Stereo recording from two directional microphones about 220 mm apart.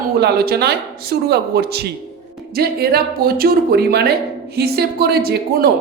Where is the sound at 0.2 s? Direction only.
45° right (ahead or behind).